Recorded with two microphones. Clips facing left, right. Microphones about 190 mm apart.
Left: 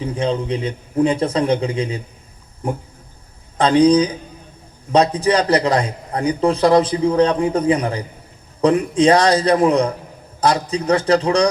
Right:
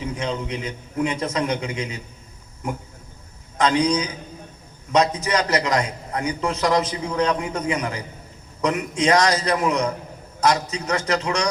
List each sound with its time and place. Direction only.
0.0 s a man's voice: 30° left (ahead or behind)